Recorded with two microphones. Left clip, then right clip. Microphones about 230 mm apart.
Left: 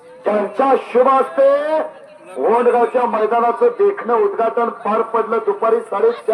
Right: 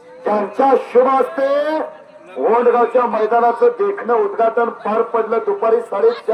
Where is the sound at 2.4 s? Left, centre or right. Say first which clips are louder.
Even; left.